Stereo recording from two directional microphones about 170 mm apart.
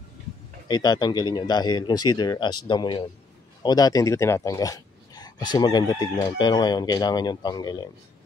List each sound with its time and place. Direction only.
0.7 s speech: 25° left (ahead or behind)